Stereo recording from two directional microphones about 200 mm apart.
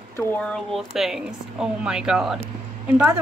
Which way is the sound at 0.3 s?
5° left (ahead or behind).